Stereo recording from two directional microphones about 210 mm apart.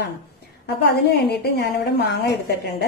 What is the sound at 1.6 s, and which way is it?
Speech, 50° left (ahead or behind).